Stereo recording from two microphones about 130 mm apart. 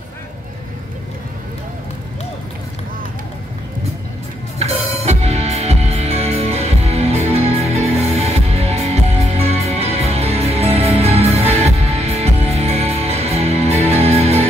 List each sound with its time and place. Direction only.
4.6 s music: 55° right (ahead or behind)